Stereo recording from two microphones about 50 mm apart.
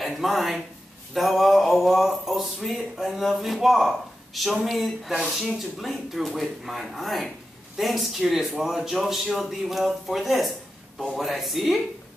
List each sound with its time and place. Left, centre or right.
0.0 s speech: centre